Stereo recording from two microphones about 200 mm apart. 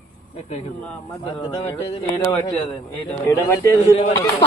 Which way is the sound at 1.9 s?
20° left (ahead or behind).